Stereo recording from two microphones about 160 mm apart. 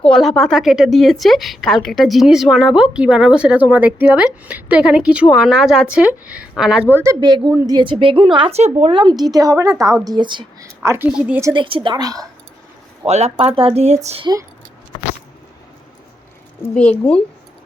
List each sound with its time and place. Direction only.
0.0 s speech: 5° left (ahead or behind)
6.9 s a woman's voice: 20° right (ahead or behind)
10.8 s a woman's voice: 15° right (ahead or behind)
11.5 s speech: 30° right (ahead or behind)
13.1 s a woman's voice: 45° right (ahead or behind)
16.7 s speech: 5° left (ahead or behind)